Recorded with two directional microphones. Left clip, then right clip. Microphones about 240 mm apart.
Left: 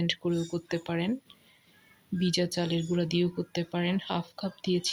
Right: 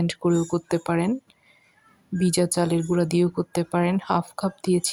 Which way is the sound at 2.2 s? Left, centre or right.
Right.